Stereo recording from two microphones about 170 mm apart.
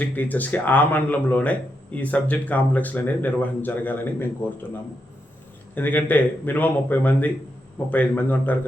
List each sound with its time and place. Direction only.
0.0 s speech: 10° left (ahead or behind)
5.7 s speech: 10° left (ahead or behind)